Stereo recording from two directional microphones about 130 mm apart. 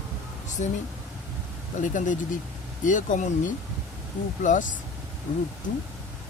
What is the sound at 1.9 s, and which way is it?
Speech, 75° left (ahead or behind).